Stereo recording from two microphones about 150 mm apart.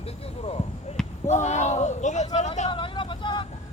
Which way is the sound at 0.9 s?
50° left (ahead or behind).